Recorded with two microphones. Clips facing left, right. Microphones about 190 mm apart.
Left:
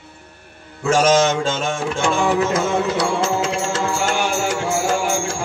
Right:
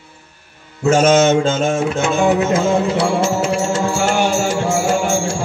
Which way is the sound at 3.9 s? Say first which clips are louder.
Right 4 dB; 30° right (ahead or behind).